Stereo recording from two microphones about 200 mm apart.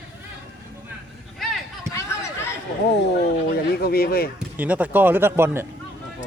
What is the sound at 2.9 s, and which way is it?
Speech, 55° left (ahead or behind).